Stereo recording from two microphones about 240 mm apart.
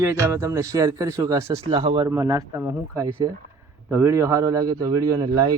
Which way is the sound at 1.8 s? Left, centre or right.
Right.